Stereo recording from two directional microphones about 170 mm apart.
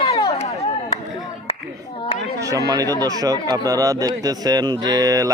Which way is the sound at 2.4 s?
20° right (ahead or behind).